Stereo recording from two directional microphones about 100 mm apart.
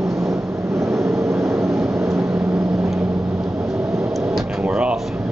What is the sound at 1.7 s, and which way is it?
Vehicle, 5° right (ahead or behind).